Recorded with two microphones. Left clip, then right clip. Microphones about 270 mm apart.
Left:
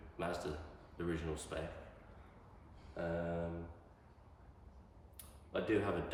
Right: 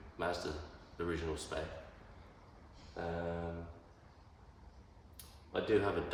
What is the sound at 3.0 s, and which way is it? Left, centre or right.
Speech, centre.